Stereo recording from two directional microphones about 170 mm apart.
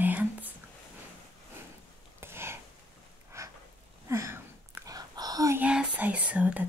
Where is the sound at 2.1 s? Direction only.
15° right (ahead or behind).